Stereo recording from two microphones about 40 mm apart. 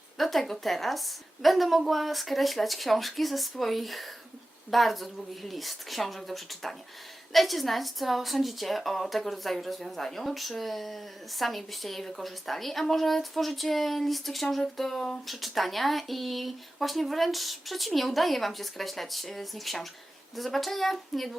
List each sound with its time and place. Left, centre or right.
0.2 s speech: centre